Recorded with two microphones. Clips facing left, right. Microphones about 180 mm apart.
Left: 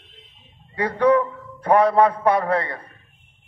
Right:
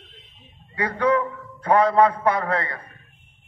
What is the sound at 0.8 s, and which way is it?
A man's voice, 30° left (ahead or behind).